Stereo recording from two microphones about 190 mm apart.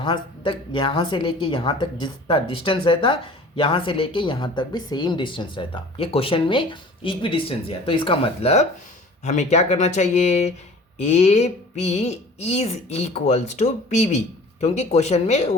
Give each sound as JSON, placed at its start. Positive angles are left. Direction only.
{"t": 0.0, "sound": "speech", "side_deg": 25}